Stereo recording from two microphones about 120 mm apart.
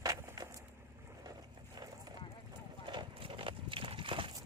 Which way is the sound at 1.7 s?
30° right (ahead or behind).